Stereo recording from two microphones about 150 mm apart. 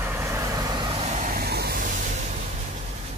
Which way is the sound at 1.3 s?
90° right.